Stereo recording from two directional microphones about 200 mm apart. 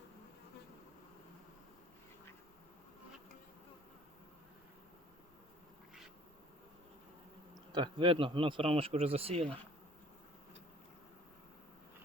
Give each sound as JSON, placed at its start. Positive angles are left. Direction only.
{"t": 7.7, "sound": "speech", "side_deg": -25}